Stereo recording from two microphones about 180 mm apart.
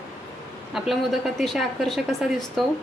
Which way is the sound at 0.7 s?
Centre (ahead or behind).